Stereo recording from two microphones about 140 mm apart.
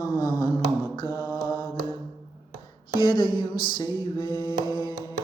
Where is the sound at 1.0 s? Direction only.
20° left (ahead or behind).